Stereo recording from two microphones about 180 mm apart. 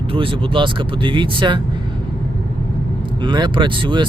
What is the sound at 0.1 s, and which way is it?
Speech, 30° right (ahead or behind).